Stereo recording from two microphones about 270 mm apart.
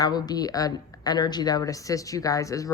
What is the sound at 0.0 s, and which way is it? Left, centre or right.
A woman's voice, centre.